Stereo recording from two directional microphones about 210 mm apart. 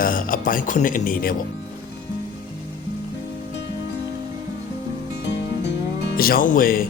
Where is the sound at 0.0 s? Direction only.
40° left (ahead or behind).